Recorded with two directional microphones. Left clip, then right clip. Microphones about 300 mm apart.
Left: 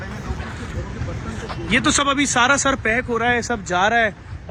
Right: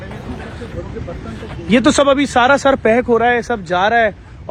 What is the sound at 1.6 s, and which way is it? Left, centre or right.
Speech, centre.